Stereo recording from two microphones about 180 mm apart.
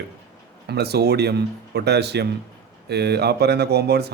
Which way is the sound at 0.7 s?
65° right (ahead or behind).